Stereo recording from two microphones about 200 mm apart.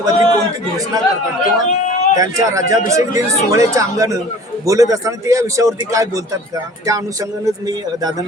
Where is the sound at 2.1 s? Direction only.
15° right (ahead or behind).